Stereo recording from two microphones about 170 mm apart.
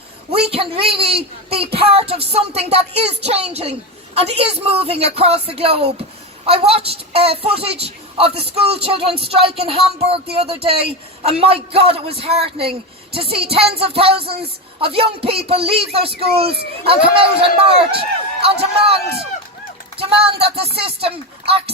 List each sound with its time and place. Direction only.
0.3 s speech: 35° right (ahead or behind)
20.0 s speech: 35° right (ahead or behind)